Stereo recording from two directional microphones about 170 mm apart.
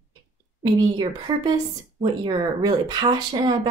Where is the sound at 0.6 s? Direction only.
25° right (ahead or behind).